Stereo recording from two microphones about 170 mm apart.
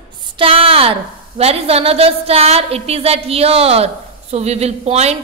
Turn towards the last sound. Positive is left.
turn(degrees=-40)  # may be behind; listen again after turning